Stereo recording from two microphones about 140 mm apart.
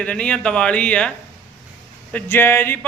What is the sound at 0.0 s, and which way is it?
A man's voice, 10° left (ahead or behind).